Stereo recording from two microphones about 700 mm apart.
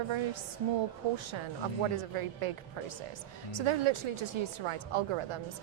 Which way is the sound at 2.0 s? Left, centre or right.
Right.